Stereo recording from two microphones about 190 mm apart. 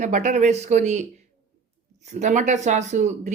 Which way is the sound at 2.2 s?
40° right (ahead or behind).